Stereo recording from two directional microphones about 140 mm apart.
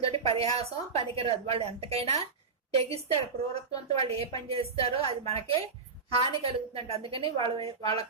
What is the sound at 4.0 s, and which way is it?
A woman's voice, 45° right (ahead or behind).